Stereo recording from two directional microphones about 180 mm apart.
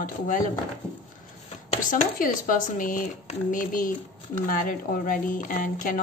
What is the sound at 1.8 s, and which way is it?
A woman's voice, 50° left (ahead or behind).